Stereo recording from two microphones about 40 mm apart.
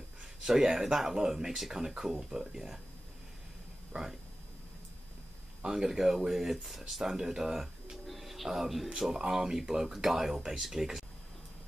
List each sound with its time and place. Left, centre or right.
0.4 s speech: centre
3.9 s speech: centre
5.7 s speech: centre